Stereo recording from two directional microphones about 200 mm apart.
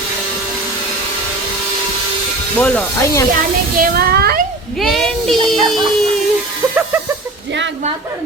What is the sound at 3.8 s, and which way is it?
Speech, 50° right (ahead or behind).